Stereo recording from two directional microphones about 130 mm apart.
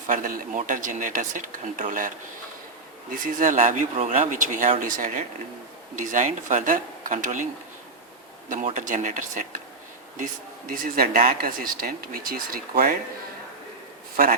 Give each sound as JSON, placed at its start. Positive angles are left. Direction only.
{"t": 0.1, "sound": "speech", "side_deg": -90}
{"t": 6.0, "sound": "speech", "side_deg": -75}
{"t": 8.7, "sound": "speech", "side_deg": -70}
{"t": 10.8, "sound": "speech", "side_deg": -90}